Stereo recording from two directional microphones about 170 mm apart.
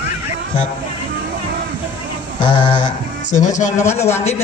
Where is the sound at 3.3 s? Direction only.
45° left (ahead or behind).